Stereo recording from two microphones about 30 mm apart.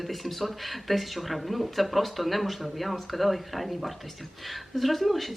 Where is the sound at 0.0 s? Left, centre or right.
Centre.